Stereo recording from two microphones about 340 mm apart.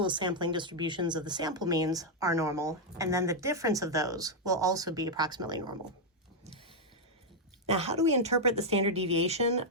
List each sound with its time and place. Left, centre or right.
0.0 s speech: centre
7.7 s speech: centre